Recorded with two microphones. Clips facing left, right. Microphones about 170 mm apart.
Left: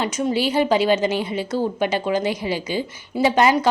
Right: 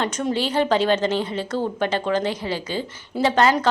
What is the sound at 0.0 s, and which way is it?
A woman's voice, 10° left (ahead or behind).